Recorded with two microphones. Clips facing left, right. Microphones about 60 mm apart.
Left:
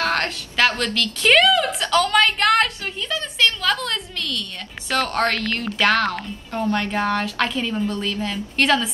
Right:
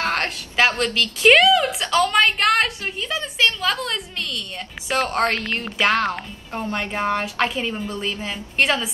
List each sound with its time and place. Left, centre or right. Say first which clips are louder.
0.0 s a woman's voice: left 1 dB; right